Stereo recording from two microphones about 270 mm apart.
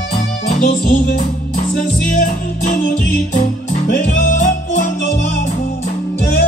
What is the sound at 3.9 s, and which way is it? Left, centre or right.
Music, left.